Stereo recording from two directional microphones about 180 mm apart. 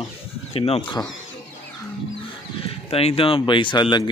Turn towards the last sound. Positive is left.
turn(degrees=25)  # may be behind; listen again after turning